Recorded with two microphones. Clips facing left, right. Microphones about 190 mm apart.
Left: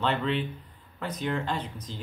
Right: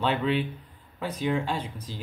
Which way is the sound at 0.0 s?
10° right (ahead or behind).